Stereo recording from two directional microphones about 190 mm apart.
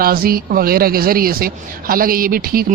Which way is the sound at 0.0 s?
50° right (ahead or behind).